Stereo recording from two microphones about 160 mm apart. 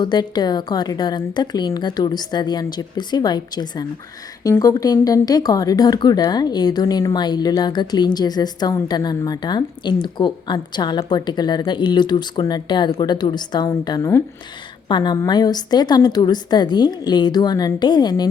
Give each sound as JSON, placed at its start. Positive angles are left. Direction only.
{"t": 0.0, "sound": "speech", "side_deg": 25}